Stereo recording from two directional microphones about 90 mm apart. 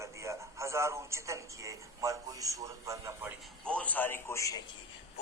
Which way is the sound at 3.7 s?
15° left (ahead or behind).